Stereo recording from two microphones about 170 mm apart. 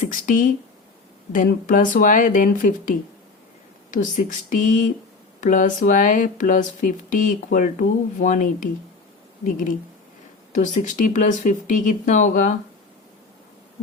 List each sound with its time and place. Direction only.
0.1 s speech: 50° left (ahead or behind)
3.9 s speech: 50° left (ahead or behind)